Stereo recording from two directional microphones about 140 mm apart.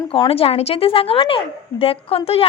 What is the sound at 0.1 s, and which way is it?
A woman's voice, 40° left (ahead or behind).